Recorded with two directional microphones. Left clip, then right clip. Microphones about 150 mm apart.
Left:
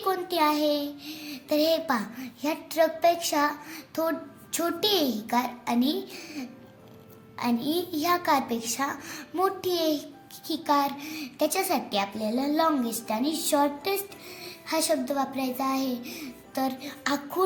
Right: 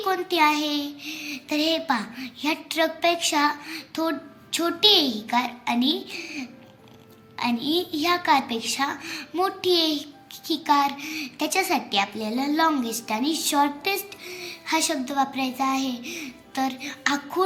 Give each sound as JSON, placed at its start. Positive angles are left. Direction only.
{"t": 0.0, "sound": "a child's voice", "side_deg": 45}